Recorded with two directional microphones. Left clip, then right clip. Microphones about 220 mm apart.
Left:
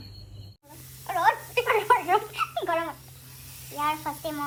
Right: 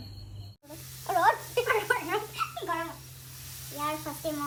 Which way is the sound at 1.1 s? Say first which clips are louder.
Left 1 dB; 20° right (ahead or behind).